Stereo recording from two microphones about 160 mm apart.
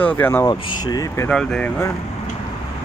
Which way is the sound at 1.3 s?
5° left (ahead or behind).